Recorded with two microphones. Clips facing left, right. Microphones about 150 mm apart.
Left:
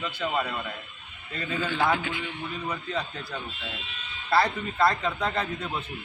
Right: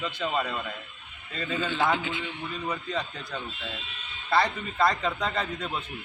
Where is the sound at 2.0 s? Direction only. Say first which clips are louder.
Even; 25° right (ahead or behind).